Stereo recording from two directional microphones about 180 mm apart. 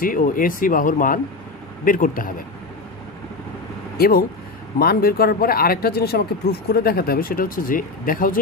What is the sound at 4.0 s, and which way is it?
Speech, 55° left (ahead or behind).